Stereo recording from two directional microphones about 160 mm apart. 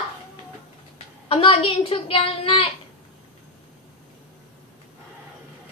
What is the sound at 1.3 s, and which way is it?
A child's voice, 30° left (ahead or behind).